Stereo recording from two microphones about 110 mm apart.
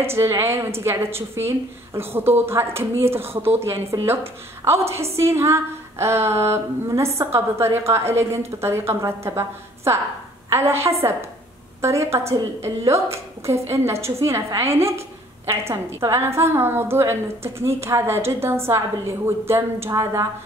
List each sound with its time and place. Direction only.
0.0 s a woman's voice: 25° right (ahead or behind)